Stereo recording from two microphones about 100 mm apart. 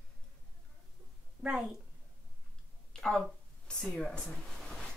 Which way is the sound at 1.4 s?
5° right (ahead or behind).